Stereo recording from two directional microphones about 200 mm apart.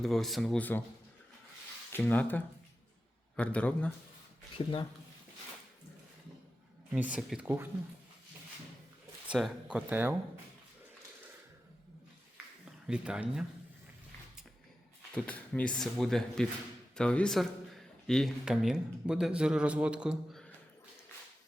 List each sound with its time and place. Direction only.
0.0 s speech: centre (ahead or behind)
1.9 s a man's voice: 10° left (ahead or behind)
4.5 s speech: 25° left (ahead or behind)
6.9 s speech: 5° right (ahead or behind)
9.2 s speech: 5° right (ahead or behind)
12.9 s speech: 5° right (ahead or behind)
15.1 s speech: 5° left (ahead or behind)